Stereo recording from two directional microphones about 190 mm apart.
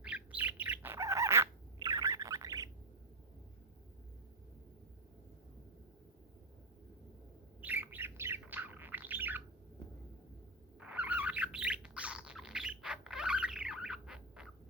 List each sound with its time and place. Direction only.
0.0 s bird: 5° right (ahead or behind)
7.6 s bird: 10° right (ahead or behind)
10.8 s bird: 10° right (ahead or behind)